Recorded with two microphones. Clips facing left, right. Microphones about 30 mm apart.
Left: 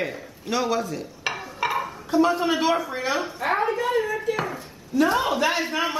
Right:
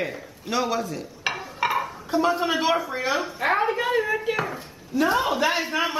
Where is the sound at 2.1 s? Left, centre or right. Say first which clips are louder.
Left 2 dB; centre.